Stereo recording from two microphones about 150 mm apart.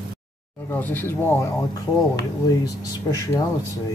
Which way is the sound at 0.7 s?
15° left (ahead or behind).